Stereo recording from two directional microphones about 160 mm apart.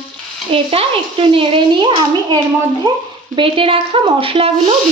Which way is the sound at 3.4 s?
35° right (ahead or behind).